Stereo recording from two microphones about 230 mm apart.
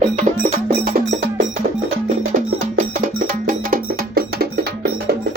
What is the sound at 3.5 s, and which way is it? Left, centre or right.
Music, right.